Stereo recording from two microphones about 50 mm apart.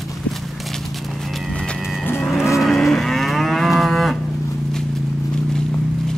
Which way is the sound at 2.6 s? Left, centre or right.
Centre.